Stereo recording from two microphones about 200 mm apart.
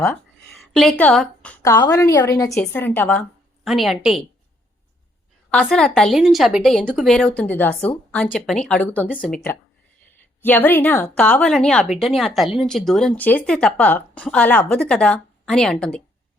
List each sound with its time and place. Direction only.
0.5 s a woman's voice: centre (ahead or behind)
5.5 s speech: 5° left (ahead or behind)